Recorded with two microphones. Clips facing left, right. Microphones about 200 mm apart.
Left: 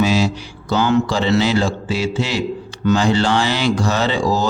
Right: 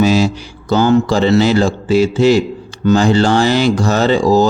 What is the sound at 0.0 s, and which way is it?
Mantra, 45° right (ahead or behind).